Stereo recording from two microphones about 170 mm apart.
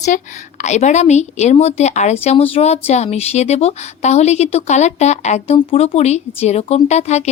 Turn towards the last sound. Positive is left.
turn(degrees=40)  # may be behind; listen again after turning